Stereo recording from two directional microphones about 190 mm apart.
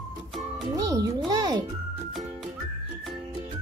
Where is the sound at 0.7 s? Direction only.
20° right (ahead or behind).